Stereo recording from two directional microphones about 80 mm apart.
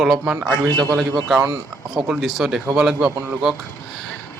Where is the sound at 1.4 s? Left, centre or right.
Right.